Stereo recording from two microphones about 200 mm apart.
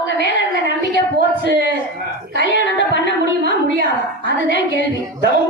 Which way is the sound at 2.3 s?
65° left (ahead or behind).